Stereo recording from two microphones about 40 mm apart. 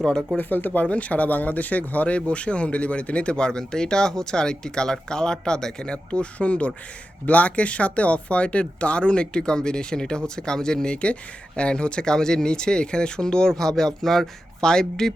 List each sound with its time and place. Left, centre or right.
0.3 s speech: left
0.9 s speech: left; by 15.1 s centre